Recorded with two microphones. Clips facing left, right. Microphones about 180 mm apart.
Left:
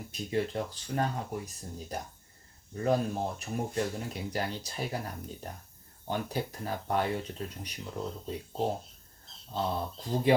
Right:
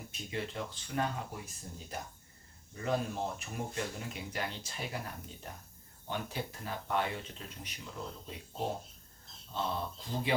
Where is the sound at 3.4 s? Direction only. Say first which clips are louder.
Left 6 dB; 40° left (ahead or behind).